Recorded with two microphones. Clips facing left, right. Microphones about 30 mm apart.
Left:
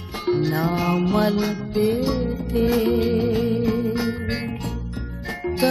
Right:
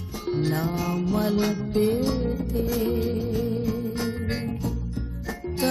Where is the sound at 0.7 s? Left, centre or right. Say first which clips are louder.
Left 5 dB; left.